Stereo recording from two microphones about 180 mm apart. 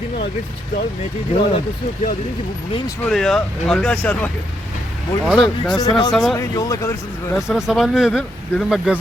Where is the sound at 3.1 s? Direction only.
Centre (ahead or behind).